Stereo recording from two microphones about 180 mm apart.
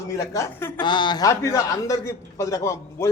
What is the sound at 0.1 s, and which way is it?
A man's voice, 15° left (ahead or behind).